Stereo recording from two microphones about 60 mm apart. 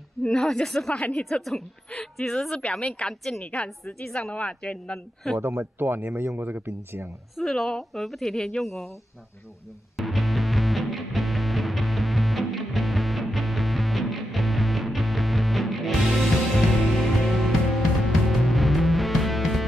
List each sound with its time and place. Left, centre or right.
0.2 s a woman's voice: centre
4.9 s a woman's voice: centre
5.4 s speech: right
5.8 s speech: right
7.3 s a woman's voice: centre
9.9 s music: centre